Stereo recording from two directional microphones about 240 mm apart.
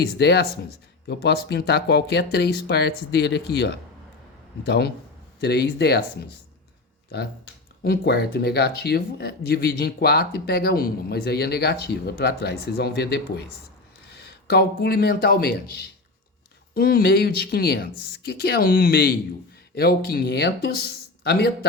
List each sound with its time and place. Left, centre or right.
0.2 s speech: left
7.9 s speech: left